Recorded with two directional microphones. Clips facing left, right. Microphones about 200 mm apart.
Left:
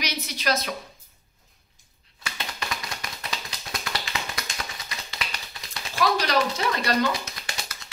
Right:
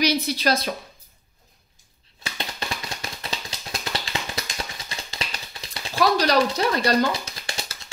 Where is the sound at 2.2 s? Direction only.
30° right (ahead or behind).